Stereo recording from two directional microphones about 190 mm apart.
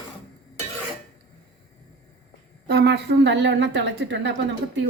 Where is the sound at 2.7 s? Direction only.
60° right (ahead or behind).